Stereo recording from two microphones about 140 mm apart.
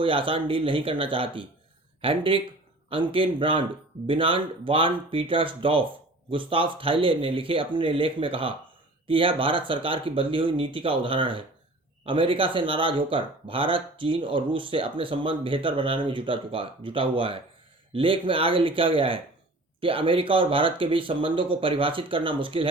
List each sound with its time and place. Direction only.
0.0 s speech: 40° right (ahead or behind)